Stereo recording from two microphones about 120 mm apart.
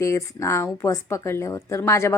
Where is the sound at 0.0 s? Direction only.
25° left (ahead or behind).